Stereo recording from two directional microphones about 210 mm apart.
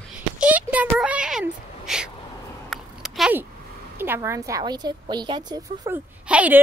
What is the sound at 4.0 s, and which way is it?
A woman's voice, 10° right (ahead or behind).